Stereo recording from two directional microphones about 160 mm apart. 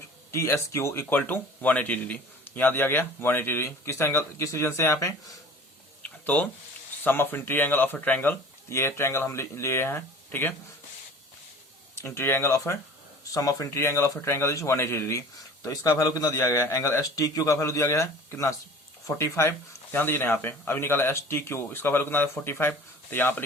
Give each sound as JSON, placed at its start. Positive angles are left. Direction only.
{"t": 0.3, "sound": "speech", "side_deg": 15}
{"t": 6.0, "sound": "a sound", "side_deg": 10}
{"t": 7.0, "sound": "speech", "side_deg": 10}
{"t": 11.9, "sound": "a man's voice", "side_deg": 15}